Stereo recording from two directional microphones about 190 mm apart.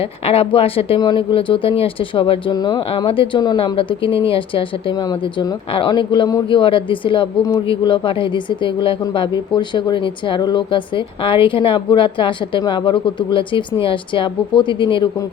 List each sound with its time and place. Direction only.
0.0 s speech: 30° left (ahead or behind)